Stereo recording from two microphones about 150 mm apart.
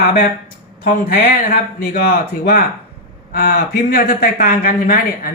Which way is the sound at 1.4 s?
90° left.